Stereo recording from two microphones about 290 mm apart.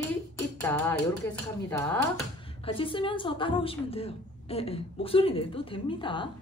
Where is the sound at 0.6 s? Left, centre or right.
Centre.